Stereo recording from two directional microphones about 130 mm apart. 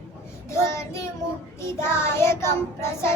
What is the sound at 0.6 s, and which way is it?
Child singing, 20° left (ahead or behind).